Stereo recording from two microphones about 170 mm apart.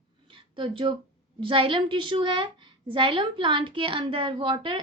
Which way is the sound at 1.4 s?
30° right (ahead or behind).